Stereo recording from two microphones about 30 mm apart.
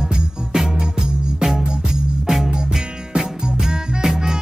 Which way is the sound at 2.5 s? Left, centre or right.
Right.